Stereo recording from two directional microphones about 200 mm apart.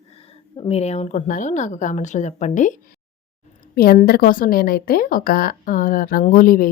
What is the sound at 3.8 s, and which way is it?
Speech, 50° left (ahead or behind).